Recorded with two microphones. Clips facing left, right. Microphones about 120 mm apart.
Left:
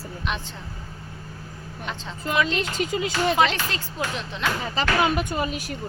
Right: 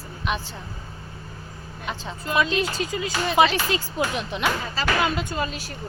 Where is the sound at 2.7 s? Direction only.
25° left (ahead or behind).